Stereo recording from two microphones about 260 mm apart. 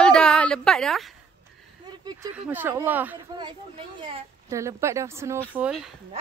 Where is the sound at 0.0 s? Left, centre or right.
Centre.